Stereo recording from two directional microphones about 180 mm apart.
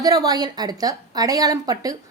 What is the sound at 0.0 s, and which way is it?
Speech, 20° right (ahead or behind).